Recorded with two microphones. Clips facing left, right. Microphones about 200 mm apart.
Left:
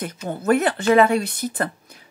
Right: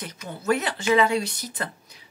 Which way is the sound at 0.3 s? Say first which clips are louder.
Left 6 dB; 50° left (ahead or behind).